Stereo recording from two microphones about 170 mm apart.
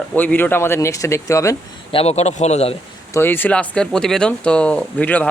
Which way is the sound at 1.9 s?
35° left (ahead or behind).